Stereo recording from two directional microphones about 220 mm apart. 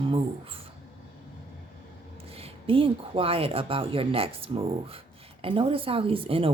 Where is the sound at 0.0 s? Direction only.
25° right (ahead or behind).